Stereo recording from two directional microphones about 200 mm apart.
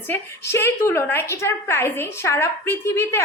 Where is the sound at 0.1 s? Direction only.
10° left (ahead or behind).